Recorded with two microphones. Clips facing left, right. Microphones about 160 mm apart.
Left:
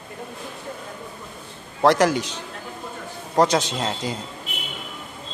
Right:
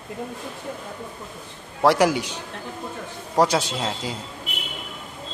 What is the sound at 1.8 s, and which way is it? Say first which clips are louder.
A man's voice: left 1 dB; 10° right (ahead or behind).